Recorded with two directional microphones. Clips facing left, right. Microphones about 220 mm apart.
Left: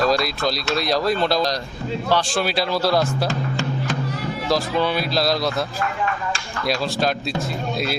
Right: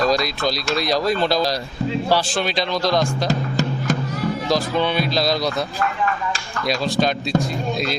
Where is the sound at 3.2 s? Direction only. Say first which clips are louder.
Right 2 dB; 40° right (ahead or behind).